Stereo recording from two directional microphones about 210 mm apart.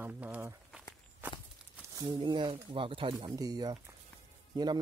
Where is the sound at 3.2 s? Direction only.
15° right (ahead or behind).